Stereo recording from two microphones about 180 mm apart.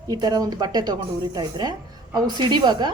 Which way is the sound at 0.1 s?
20° right (ahead or behind).